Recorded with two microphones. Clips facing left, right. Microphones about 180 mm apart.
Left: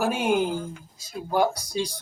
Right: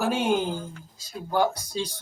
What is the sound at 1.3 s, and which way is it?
Speech, 10° left (ahead or behind).